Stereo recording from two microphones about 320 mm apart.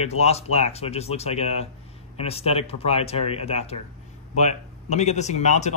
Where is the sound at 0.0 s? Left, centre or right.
Centre.